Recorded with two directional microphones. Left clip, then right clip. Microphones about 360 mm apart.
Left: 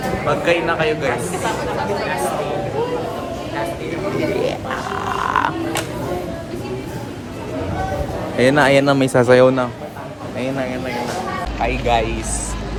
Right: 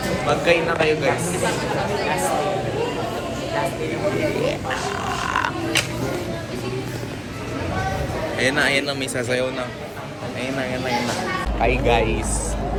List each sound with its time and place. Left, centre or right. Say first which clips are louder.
0.3 s a man's voice: left 1 dB; centre
8.4 s a man's voice: left 7 dB; left
11.6 s a man's voice: left 1 dB; centre